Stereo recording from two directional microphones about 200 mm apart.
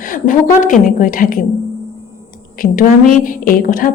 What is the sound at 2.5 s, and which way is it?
A woman's voice, 45° left (ahead or behind).